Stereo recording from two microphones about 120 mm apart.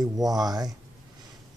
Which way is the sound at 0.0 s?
35° right (ahead or behind).